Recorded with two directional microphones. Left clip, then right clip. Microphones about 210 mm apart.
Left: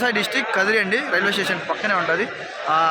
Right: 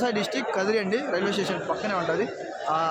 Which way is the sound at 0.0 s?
Centre (ahead or behind).